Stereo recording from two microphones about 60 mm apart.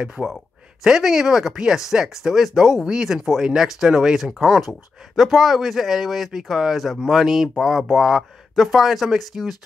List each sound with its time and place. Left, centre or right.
0.0 s speech: centre